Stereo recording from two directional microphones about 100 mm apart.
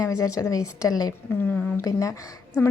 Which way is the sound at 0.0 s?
35° left (ahead or behind).